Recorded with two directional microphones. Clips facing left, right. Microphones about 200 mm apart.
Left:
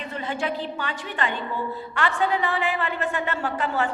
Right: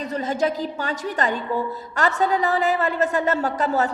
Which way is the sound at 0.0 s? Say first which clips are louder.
Right 6 dB; 40° right (ahead or behind).